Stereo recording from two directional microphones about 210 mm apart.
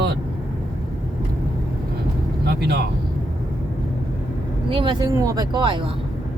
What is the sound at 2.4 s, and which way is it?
Speech, 50° right (ahead or behind).